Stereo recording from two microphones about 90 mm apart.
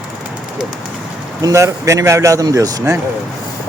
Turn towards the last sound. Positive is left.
turn(degrees=-40)  # may be behind; listen again after turning